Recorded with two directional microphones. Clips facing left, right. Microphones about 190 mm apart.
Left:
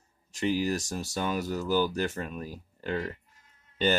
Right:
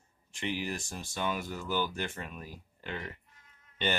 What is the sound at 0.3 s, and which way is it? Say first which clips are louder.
Speech: left 8 dB; 40° left (ahead or behind).